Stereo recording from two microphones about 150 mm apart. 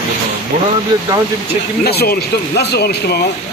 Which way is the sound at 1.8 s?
90° left.